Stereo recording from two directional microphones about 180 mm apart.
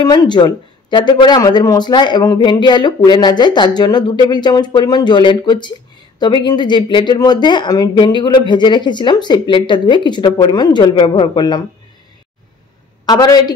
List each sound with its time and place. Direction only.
0.0 s speech: 20° left (ahead or behind)
13.0 s a woman's voice: 20° left (ahead or behind)